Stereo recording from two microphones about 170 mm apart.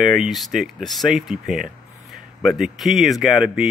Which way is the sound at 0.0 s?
Centre (ahead or behind).